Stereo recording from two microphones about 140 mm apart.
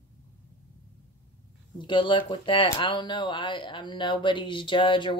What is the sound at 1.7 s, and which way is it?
A woman's voice, 35° left (ahead or behind).